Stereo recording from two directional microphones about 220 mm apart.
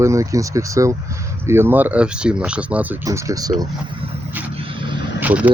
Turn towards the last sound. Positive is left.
turn(degrees=-5)  # may be behind; listen again after turning